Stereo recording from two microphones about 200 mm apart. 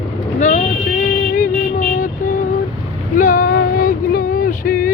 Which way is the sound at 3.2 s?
45° left (ahead or behind).